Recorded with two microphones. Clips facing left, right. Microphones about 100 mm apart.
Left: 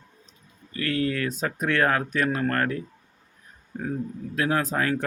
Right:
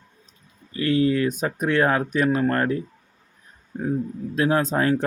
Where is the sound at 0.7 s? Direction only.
20° right (ahead or behind).